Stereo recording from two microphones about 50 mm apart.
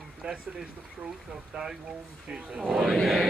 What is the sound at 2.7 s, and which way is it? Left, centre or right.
Speech, centre.